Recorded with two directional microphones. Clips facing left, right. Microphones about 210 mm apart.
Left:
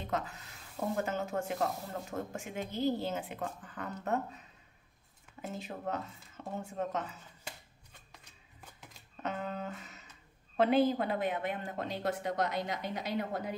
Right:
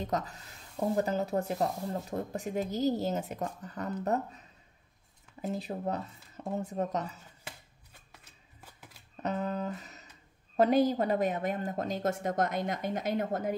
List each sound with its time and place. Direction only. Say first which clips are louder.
0.0 s speech: right 3 dB; 40° right (ahead or behind)
5.4 s speech: right 5 dB; 35° right (ahead or behind)
8.2 s shuffling cards: even; 5° right (ahead or behind)
9.2 s music: right 5 dB; 40° right (ahead or behind)
10.5 s speech: right 2 dB; 40° right (ahead or behind)